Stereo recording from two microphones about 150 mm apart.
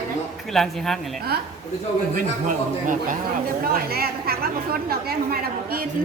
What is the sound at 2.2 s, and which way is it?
A woman's voice, 60° right (ahead or behind).